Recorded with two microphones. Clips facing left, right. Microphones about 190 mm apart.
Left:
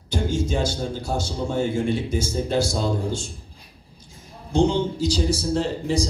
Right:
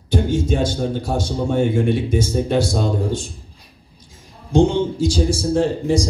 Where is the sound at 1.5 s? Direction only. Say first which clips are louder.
Right 5 dB; 55° right (ahead or behind).